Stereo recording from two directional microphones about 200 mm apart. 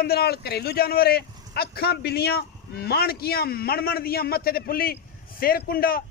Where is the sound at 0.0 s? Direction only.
50° left (ahead or behind).